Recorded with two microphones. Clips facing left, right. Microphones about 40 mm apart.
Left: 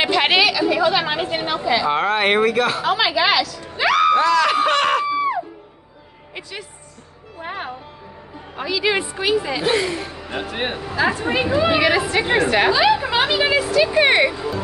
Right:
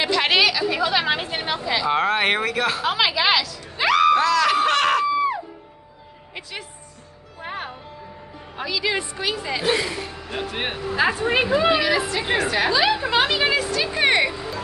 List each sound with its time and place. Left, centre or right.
0.0 s chatter: left
0.4 s a woman's voice: centre
7.3 s music: centre
8.5 s speech: centre
8.8 s a woman's voice: centre
11.8 s a woman's voice: left
12.7 s speech: centre